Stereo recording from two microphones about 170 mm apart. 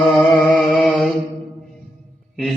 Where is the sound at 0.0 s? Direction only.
Centre (ahead or behind).